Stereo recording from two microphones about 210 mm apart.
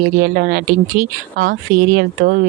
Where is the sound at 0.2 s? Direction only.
45° right (ahead or behind).